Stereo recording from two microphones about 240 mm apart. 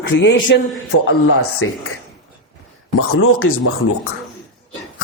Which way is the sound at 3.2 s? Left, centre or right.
Left.